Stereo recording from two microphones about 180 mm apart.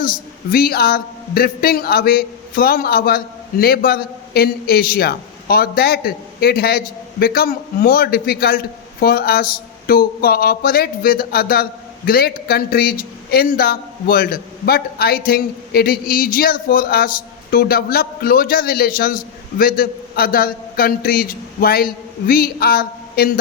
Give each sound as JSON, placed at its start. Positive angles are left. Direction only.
{"t": 0.0, "sound": "a woman's voice", "side_deg": 55}